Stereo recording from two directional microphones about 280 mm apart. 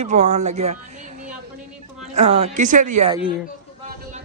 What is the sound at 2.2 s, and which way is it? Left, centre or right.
Speech, right.